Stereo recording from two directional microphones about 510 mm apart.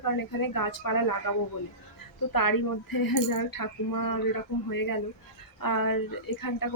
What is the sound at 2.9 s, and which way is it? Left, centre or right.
Speech, left.